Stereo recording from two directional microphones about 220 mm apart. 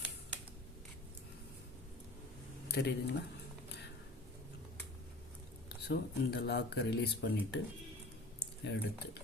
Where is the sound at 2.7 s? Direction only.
50° left (ahead or behind).